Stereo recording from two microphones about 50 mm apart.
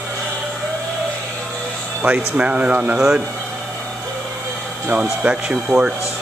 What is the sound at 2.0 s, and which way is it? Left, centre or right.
Speech, right.